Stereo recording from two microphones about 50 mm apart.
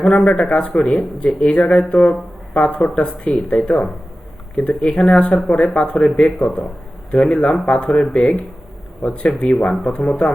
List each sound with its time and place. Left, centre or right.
0.0 s speech: left